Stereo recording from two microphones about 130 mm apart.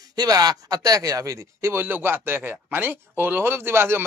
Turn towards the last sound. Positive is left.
turn(degrees=-20)  # may be behind; listen again after turning